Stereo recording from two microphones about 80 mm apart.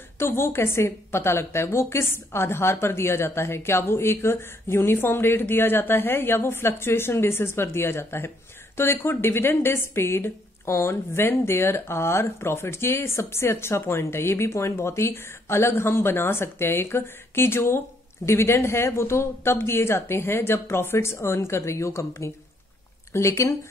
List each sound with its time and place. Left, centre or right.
0.2 s a woman's voice: left